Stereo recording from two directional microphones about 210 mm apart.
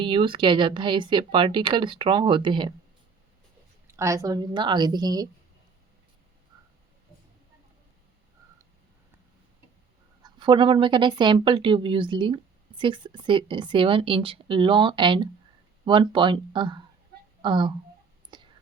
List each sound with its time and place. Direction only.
0.0 s speech: 25° right (ahead or behind)
3.8 s a woman's voice: 15° right (ahead or behind)
10.2 s speech: 20° right (ahead or behind)
18.3 s whispering: 20° right (ahead or behind)